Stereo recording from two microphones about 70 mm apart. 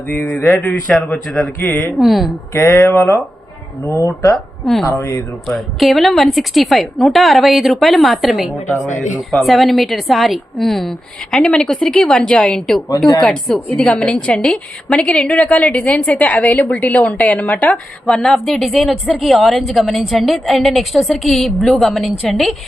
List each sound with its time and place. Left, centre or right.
0.2 s a woman's voice: left
2.0 s a woman's voice: centre
2.5 s speech: left
3.8 s speech: left
4.6 s a woman's voice: centre
4.9 s a woman's voice: left
5.5 s a woman's voice: centre
18.0 s a woman's voice: centre